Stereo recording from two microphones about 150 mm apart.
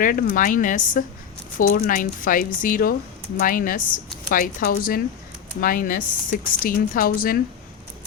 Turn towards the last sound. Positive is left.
turn(degrees=75)  # may be behind; listen again after turning